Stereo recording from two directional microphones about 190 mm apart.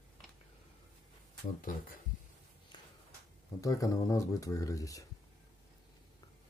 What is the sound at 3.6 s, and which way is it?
Speech, 15° left (ahead or behind).